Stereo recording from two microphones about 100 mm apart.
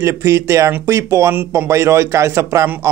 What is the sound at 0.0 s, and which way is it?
A man's voice, 30° right (ahead or behind).